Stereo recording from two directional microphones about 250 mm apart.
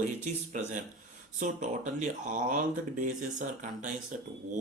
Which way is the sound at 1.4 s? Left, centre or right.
Right.